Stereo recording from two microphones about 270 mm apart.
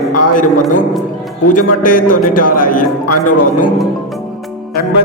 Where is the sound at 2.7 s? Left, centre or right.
Left.